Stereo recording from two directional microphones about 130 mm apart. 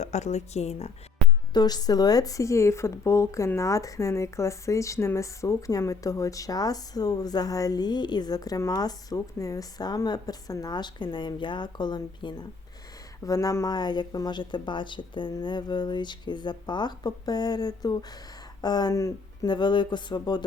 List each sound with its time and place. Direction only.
0.0 s speech: 60° left (ahead or behind)
1.2 s music: 5° left (ahead or behind)
1.5 s speech: 30° left (ahead or behind)